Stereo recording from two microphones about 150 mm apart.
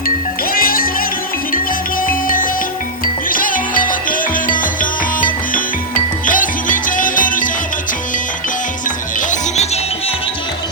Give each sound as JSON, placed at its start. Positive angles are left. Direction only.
{"t": 0.5, "sound": "music", "side_deg": 70}
{"t": 2.0, "sound": "music", "side_deg": 65}